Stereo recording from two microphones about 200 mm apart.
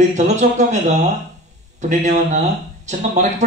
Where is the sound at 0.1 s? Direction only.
35° right (ahead or behind).